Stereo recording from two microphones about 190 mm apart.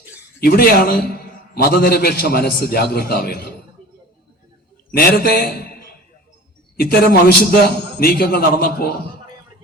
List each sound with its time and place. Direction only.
0.4 s a man's voice: 55° left (ahead or behind)
4.9 s a man's voice: 55° left (ahead or behind)